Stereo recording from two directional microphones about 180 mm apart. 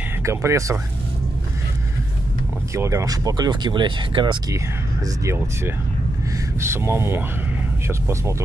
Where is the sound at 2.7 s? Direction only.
15° right (ahead or behind).